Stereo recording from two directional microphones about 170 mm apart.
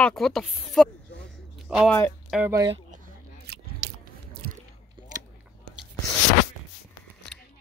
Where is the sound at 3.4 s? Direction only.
70° right (ahead or behind).